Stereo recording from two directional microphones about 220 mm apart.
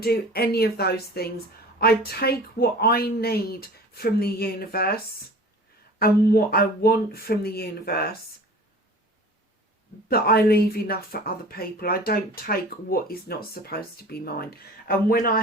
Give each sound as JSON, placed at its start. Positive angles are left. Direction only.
{"t": 0.0, "sound": "speech", "side_deg": 45}
{"t": 6.0, "sound": "speech", "side_deg": 45}
{"t": 10.1, "sound": "speech", "side_deg": 45}